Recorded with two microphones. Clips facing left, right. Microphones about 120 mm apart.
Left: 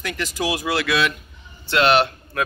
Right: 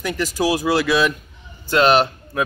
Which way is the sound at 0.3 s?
40° right (ahead or behind).